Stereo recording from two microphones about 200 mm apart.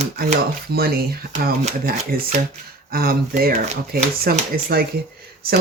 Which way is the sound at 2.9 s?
50° right (ahead or behind).